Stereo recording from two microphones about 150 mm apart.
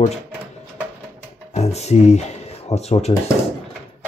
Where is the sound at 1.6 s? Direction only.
45° left (ahead or behind).